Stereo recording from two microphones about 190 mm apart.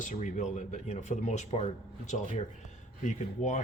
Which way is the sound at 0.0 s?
40° left (ahead or behind).